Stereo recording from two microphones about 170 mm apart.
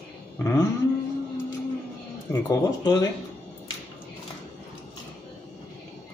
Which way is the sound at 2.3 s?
20° left (ahead or behind).